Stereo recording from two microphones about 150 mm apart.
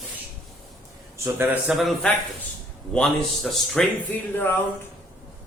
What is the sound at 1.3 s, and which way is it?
Speech, 15° right (ahead or behind).